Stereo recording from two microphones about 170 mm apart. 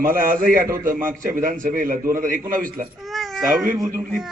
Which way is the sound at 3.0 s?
Centre (ahead or behind).